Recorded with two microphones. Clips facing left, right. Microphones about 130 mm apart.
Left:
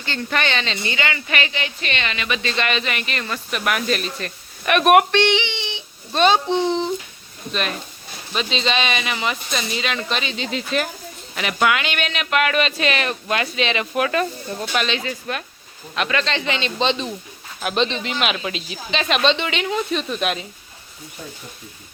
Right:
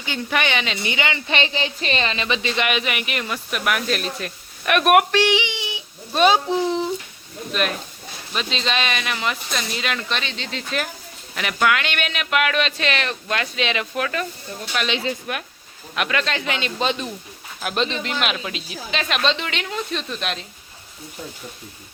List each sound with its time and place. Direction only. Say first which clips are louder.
0.0 s speech: even; 10° right (ahead or behind); by 2.4 s 30° right (ahead or behind)
2.4 s speech: even; 15° right (ahead or behind); by 14.0 s centre (ahead or behind)
14.8 s speech: right 1 dB; 20° right (ahead or behind)
16.0 s speech: left 1 dB; 5° right (ahead or behind)